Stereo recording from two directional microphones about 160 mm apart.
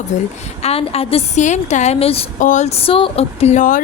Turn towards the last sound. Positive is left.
turn(degrees=55)  # may be behind; listen again after turning